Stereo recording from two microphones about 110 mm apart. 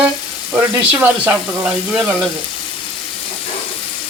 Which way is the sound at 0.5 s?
15° right (ahead or behind).